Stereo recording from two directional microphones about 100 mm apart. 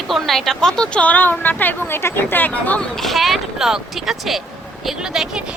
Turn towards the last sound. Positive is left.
turn(degrees=-5)  # may be behind; listen again after turning